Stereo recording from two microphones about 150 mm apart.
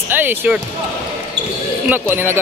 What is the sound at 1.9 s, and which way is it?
Speech, 15° right (ahead or behind).